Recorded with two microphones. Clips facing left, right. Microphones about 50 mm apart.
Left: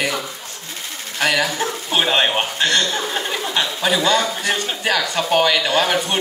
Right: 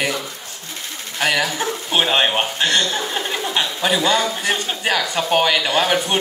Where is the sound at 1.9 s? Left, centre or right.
Centre.